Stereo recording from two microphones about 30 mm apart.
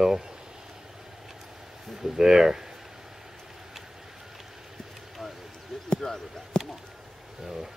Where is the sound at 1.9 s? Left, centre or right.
Centre.